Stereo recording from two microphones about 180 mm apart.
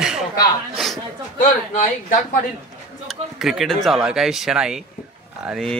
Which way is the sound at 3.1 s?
Centre (ahead or behind).